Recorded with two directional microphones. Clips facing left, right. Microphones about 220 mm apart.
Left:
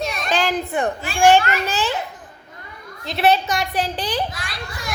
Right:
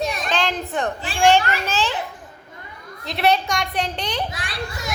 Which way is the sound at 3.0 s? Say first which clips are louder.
Left 2 dB; centre (ahead or behind).